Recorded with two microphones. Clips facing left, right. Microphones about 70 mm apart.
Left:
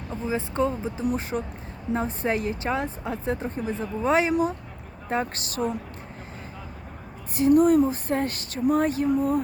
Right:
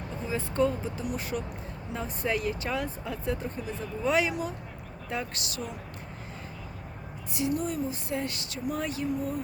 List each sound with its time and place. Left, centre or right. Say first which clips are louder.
0.3 s a woman's voice: left 2 dB; left
7.3 s speech: left 12 dB; left